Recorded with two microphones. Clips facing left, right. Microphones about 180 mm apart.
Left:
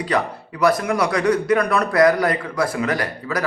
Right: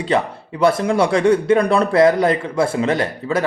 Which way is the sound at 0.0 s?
25° right (ahead or behind).